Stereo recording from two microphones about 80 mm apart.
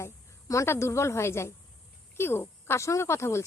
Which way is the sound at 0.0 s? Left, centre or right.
Left.